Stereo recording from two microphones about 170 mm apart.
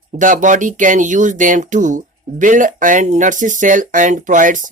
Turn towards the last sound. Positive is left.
turn(degrees=-50)  # may be behind; listen again after turning